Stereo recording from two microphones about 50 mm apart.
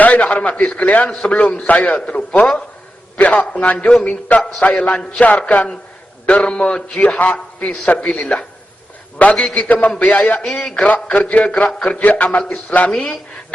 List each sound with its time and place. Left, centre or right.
0.0 s a man's voice: left
10.4 s a man's voice: centre
10.8 s a man's voice: left